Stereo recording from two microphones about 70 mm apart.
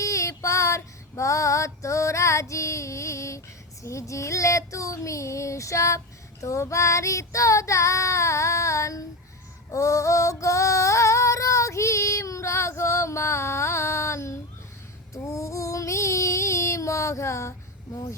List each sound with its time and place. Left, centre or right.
0.0 s female singing: left
3.8 s child singing: left
9.7 s female singing: left
15.1 s child singing: left